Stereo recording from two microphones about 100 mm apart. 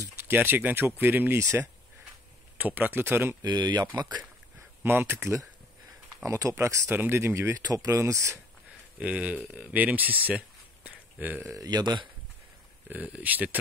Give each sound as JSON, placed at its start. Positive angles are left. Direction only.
{"t": 0.3, "sound": "speech", "side_deg": -20}
{"t": 2.5, "sound": "speech", "side_deg": -20}
{"t": 3.4, "sound": "speech", "side_deg": -45}
{"t": 4.6, "sound": "speech", "side_deg": -25}
{"t": 9.0, "sound": "speech", "side_deg": -15}
{"t": 11.5, "sound": "speech", "side_deg": -40}
{"t": 12.9, "sound": "speech", "side_deg": -15}